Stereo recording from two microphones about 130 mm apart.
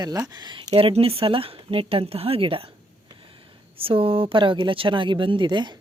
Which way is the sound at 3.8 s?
45° right (ahead or behind).